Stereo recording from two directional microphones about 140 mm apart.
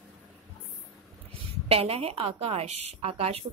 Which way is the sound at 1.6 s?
45° right (ahead or behind).